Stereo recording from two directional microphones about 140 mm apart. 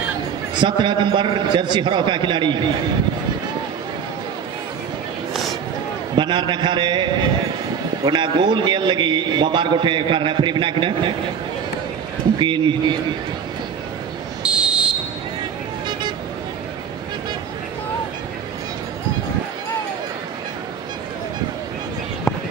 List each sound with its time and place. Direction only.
0.6 s a man's voice: 35° right (ahead or behind)
6.1 s a man's voice: 35° right (ahead or behind)
12.4 s a man's voice: 35° right (ahead or behind)
14.5 s fire alarm: 5° right (ahead or behind)